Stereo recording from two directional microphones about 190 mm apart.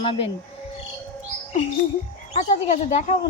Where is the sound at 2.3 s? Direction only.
35° left (ahead or behind).